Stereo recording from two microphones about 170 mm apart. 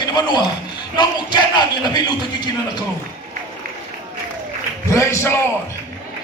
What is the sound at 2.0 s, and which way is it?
Speech, 25° left (ahead or behind).